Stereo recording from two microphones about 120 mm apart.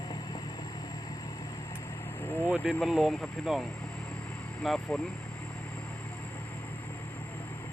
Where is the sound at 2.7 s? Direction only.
Centre (ahead or behind).